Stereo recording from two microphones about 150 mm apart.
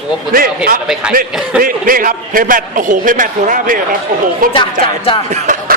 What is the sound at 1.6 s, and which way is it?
A man's voice, 70° right (ahead or behind).